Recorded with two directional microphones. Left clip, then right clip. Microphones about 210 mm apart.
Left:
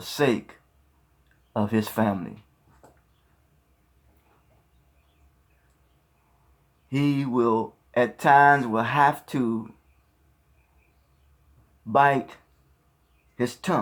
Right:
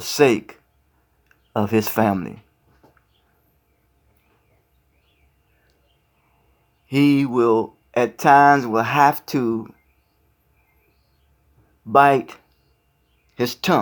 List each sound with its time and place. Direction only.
0.0 s speech: 45° right (ahead or behind)
1.5 s speech: 50° right (ahead or behind)
6.9 s speech: 50° right (ahead or behind)
11.9 s speech: 40° right (ahead or behind)